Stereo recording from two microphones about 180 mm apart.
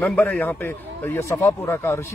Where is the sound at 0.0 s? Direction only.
10° left (ahead or behind).